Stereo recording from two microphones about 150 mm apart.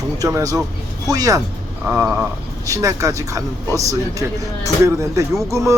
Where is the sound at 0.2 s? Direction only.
20° right (ahead or behind).